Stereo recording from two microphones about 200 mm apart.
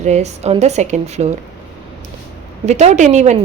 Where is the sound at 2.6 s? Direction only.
35° right (ahead or behind).